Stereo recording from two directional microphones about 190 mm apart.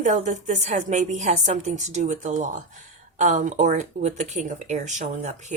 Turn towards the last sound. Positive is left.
turn(degrees=-40)  # may be behind; listen again after turning